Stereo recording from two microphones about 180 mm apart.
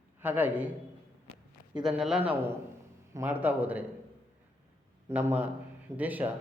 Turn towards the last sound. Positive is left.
turn(degrees=-10)  # may be behind; listen again after turning